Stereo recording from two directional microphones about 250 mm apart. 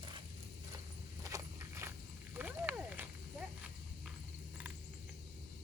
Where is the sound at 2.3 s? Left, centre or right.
Centre.